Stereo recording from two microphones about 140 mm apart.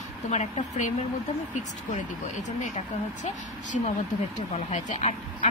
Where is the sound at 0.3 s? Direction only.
55° left (ahead or behind).